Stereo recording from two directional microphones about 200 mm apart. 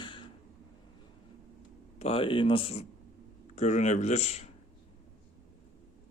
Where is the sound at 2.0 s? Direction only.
25° left (ahead or behind).